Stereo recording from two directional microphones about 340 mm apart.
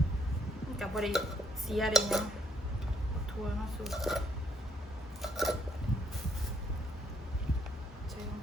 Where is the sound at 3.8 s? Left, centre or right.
Centre.